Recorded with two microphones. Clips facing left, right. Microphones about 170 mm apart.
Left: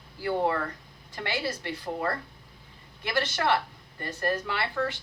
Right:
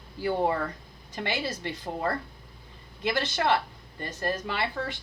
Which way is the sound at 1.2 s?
20° right (ahead or behind).